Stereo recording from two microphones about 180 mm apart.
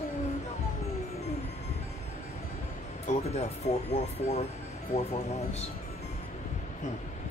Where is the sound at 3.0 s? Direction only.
40° left (ahead or behind).